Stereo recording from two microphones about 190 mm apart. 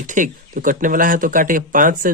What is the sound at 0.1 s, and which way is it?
Speech, 45° right (ahead or behind).